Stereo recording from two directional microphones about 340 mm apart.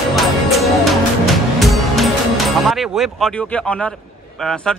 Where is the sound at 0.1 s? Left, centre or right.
Centre.